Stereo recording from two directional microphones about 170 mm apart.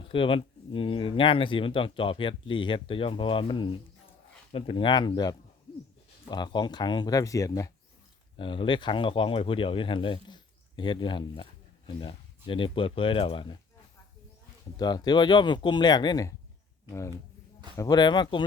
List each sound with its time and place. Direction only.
0.0 s speech: 30° left (ahead or behind)
8.4 s speech: 30° left (ahead or behind)
14.8 s speech: 25° left (ahead or behind)